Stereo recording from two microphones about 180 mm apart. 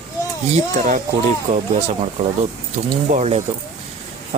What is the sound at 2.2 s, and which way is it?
Speech, 35° right (ahead or behind).